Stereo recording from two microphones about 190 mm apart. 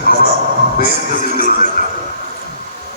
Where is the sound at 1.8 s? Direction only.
50° left (ahead or behind).